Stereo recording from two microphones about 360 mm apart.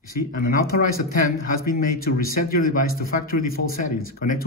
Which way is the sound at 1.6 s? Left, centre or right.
Left.